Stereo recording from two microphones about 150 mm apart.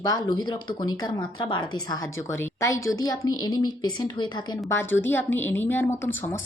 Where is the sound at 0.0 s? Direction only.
25° left (ahead or behind).